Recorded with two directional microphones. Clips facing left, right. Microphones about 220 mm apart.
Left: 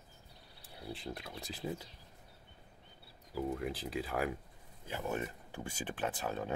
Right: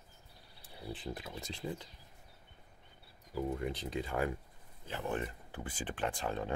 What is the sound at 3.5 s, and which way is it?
Speech, centre (ahead or behind).